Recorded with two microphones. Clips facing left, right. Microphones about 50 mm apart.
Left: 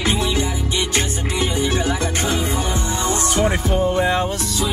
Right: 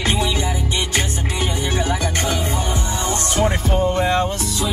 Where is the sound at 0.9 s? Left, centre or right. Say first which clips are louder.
Left 1 dB; centre.